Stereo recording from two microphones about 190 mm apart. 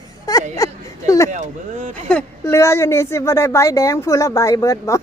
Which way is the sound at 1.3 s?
40° right (ahead or behind).